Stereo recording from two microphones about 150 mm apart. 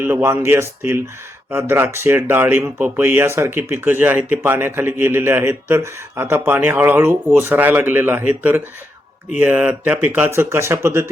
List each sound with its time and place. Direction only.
0.0 s speech: 15° right (ahead or behind)
9.3 s speech: 10° right (ahead or behind)